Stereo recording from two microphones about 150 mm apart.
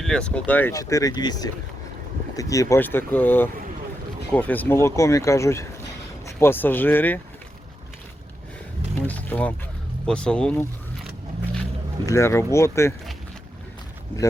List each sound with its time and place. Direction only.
0.0 s speech: 5° left (ahead or behind)
0.7 s speech: 20° left (ahead or behind)
9.0 s a sound: 10° left (ahead or behind)
10.1 s speech: 5° left (ahead or behind)
12.0 s speech: 20° left (ahead or behind)